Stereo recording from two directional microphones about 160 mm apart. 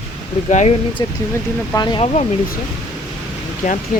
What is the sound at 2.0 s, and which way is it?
Speech, 45° left (ahead or behind).